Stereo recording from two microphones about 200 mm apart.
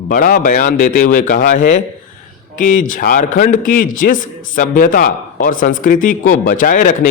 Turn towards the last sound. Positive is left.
turn(degrees=40)  # may be behind; listen again after turning